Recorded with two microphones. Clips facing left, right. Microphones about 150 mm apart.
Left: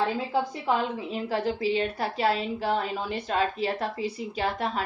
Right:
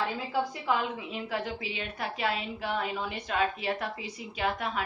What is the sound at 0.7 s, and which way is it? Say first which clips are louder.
A woman's voice: left 3 dB; 25° left (ahead or behind).